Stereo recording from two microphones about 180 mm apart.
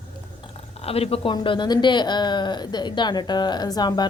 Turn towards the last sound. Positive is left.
turn(degrees=20)  # may be behind; listen again after turning